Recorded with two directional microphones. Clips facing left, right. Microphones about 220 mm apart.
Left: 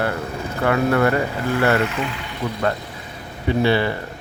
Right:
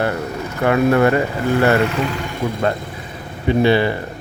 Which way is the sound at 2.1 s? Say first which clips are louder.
Right 6 dB; 45° right (ahead or behind).